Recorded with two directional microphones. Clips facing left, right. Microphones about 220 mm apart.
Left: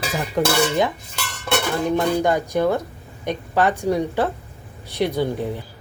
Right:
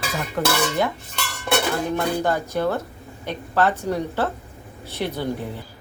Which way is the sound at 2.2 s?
15° left (ahead or behind).